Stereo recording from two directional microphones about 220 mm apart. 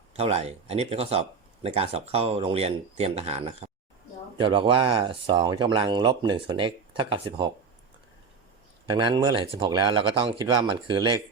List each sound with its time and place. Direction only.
0.1 s speech: 30° right (ahead or behind)
8.9 s speech: 20° right (ahead or behind)